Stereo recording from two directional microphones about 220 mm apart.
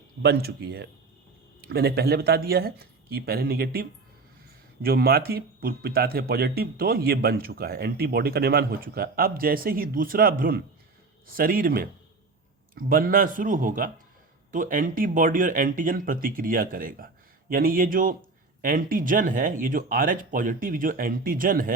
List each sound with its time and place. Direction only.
0.2 s speech: 45° right (ahead or behind)